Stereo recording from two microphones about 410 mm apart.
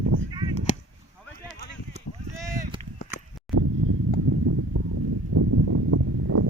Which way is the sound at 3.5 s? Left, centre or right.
Centre.